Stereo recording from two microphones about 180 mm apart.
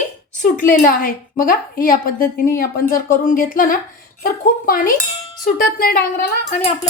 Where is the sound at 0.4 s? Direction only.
50° left (ahead or behind).